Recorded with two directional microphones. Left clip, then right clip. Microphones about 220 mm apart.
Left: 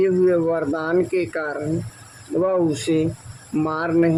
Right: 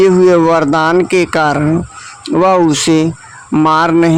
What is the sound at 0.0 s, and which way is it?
Speech, 45° right (ahead or behind).